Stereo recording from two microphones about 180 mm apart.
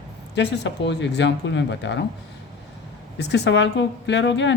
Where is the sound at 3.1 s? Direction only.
70° left (ahead or behind).